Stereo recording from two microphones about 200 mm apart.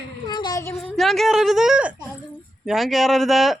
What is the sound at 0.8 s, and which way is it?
Speech, centre (ahead or behind).